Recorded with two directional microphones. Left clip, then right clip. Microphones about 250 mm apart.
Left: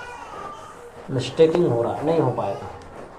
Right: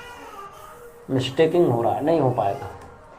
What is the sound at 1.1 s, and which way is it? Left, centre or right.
Speech, right.